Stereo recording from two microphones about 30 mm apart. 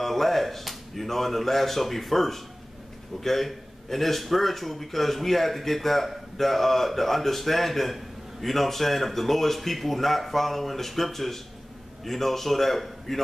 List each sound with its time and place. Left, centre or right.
0.0 s a man's voice: centre